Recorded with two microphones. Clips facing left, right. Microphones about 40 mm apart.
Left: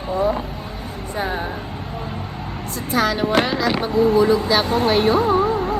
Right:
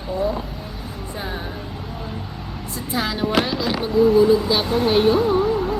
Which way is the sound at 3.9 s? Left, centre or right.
Left.